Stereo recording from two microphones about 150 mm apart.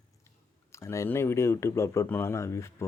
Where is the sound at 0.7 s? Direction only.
20° left (ahead or behind).